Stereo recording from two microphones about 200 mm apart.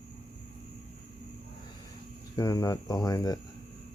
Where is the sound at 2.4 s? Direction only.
15° left (ahead or behind).